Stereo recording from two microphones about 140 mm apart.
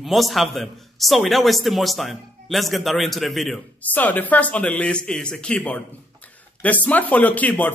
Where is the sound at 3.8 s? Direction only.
10° left (ahead or behind).